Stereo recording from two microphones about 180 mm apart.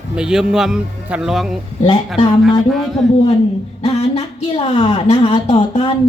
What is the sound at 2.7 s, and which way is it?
Speech, centre (ahead or behind).